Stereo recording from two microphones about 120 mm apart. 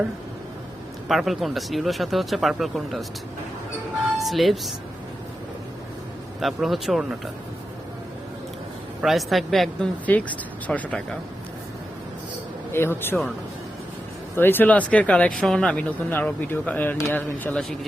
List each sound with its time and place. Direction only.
1.0 s speech: centre (ahead or behind)
4.2 s speech: centre (ahead or behind)
6.4 s speech: centre (ahead or behind)
9.0 s speech: centre (ahead or behind)
12.7 s speech: 20° left (ahead or behind)
14.3 s speech: 15° left (ahead or behind)